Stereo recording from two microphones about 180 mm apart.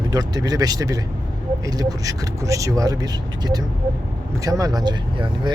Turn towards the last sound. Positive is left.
turn(degrees=-25)  # may be behind; listen again after turning